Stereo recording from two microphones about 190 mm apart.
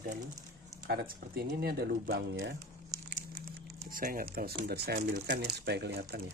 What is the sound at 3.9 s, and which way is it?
Speech, 50° right (ahead or behind).